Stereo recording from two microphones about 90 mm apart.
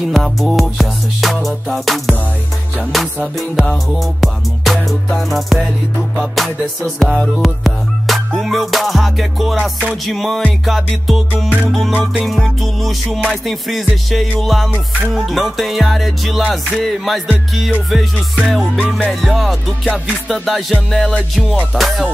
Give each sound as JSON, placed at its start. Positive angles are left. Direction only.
{"t": 0.0, "sound": "music", "side_deg": 0}
{"t": 3.3, "sound": "music", "side_deg": 0}
{"t": 11.7, "sound": "music", "side_deg": 0}